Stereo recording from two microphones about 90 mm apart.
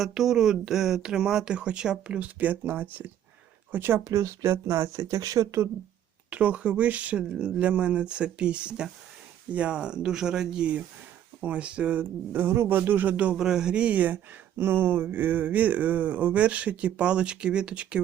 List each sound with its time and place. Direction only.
0.0 s speech: 5° right (ahead or behind); by 5.6 s 35° right (ahead or behind)
6.3 s speech: 15° right (ahead or behind)